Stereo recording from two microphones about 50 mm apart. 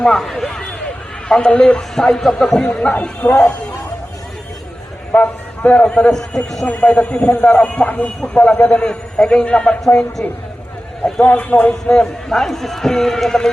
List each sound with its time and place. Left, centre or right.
0.0 s a man's voice: centre
1.3 s a man's voice: centre
2.6 s speech: left
5.1 s a man's voice: left; by 6.7 s centre
6.7 s a man's voice: left
11.0 s a man's voice: left
11.7 s a man's voice: centre